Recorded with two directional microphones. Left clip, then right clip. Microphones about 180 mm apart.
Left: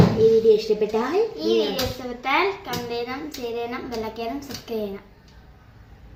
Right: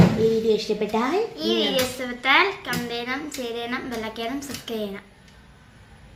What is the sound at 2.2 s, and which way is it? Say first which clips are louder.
A woman's voice: right 3 dB; 5° left (ahead or behind).